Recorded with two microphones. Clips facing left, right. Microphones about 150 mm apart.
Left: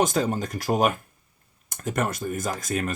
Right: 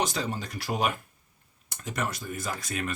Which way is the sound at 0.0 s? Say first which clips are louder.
Left 7 dB; 50° left (ahead or behind).